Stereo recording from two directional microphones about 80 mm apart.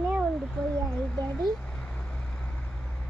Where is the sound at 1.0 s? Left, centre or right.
Centre.